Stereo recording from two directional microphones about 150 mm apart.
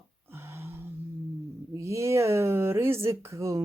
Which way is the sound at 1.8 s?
20° right (ahead or behind).